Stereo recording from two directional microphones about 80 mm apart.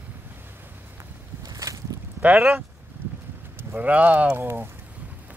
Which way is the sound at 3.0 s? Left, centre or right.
Right.